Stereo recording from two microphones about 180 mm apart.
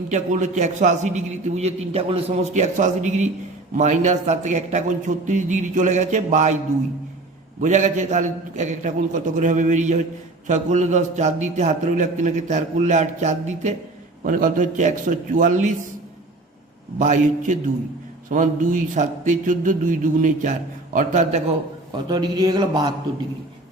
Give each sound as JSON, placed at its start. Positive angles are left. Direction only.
{"t": 0.1, "sound": "a man's voice", "side_deg": -40}
{"t": 7.6, "sound": "a man's voice", "side_deg": -45}
{"t": 17.0, "sound": "a man's voice", "side_deg": -45}
{"t": 21.9, "sound": "a man's voice", "side_deg": -25}